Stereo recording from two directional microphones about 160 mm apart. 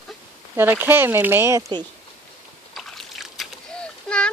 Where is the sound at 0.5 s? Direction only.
15° right (ahead or behind).